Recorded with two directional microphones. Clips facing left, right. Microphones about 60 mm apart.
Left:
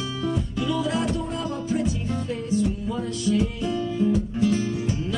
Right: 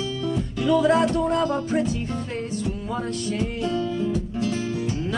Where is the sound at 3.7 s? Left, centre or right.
Centre.